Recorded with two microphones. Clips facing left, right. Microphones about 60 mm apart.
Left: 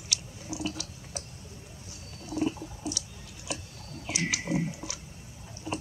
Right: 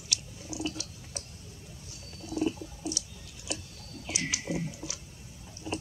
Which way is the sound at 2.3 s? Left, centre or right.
Centre.